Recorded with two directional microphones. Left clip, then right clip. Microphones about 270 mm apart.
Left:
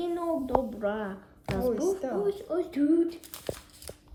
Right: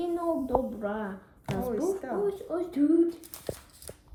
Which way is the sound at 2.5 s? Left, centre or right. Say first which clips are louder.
Left 1 dB; centre.